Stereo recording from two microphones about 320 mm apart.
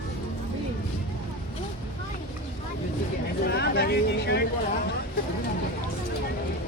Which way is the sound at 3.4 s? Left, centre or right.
Left.